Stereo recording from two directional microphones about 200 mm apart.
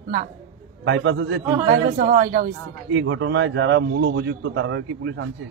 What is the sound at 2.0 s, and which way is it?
Speech, 45° right (ahead or behind).